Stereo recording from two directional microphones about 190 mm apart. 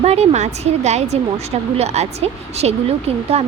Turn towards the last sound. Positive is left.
turn(degrees=-35)  # may be behind; listen again after turning